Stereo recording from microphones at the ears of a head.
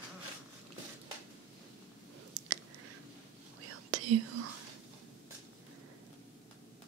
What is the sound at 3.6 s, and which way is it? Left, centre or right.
Whispering, right.